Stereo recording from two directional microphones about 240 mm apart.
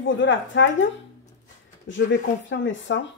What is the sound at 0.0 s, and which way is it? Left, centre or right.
Speech, left.